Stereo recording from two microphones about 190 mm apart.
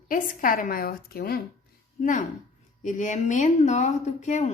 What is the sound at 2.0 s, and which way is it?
Speech, 40° left (ahead or behind).